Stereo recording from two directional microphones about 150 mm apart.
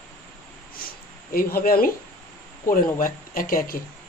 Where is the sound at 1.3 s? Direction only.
80° left.